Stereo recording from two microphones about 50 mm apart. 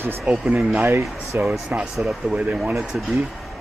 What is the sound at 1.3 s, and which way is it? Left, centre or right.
Speech, right.